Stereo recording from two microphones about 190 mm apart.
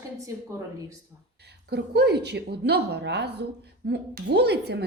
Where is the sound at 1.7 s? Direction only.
60° right (ahead or behind).